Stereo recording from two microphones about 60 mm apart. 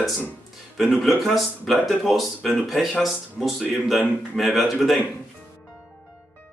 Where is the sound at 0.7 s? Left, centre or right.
Centre.